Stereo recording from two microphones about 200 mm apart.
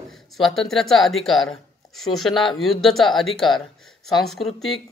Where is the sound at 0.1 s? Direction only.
Centre (ahead or behind).